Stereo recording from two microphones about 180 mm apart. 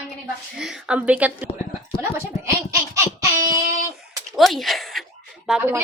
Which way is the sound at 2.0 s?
15° right (ahead or behind).